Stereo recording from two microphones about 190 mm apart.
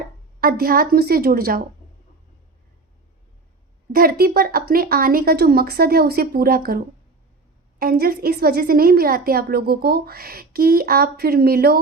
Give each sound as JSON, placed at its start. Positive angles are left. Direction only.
{"t": 0.3, "sound": "a woman's voice", "side_deg": -50}
{"t": 3.9, "sound": "a woman's voice", "side_deg": -50}